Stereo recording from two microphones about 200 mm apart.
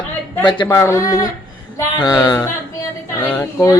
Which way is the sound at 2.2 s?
20° left (ahead or behind).